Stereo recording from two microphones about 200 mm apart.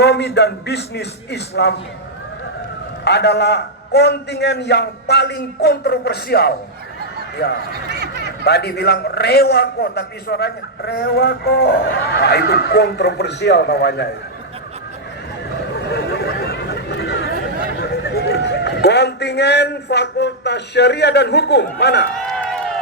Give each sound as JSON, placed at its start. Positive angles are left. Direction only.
{"t": 0.0, "sound": "a man's voice", "side_deg": 55}
{"t": 3.0, "sound": "a man's voice", "side_deg": 55}
{"t": 7.7, "sound": "a sound", "side_deg": -55}
{"t": 8.4, "sound": "a man's voice", "side_deg": 55}
{"t": 15.9, "sound": "a sound", "side_deg": 55}
{"t": 17.7, "sound": "a man's voice", "side_deg": 55}
{"t": 22.1, "sound": "run", "side_deg": 5}